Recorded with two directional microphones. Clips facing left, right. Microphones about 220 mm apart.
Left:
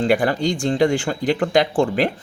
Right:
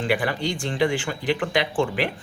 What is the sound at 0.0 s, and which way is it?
Speech, 45° left (ahead or behind).